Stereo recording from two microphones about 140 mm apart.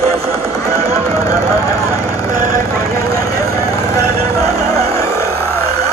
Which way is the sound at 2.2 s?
25° left (ahead or behind).